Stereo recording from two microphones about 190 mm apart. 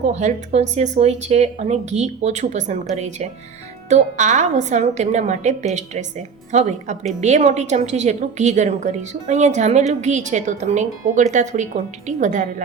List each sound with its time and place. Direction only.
0.0 s a woman's voice: 40° right (ahead or behind)